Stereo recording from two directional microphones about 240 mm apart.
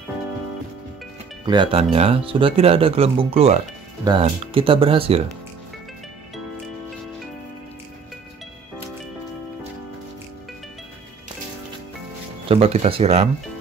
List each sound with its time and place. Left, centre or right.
1.4 s speech: centre
12.4 s speech: right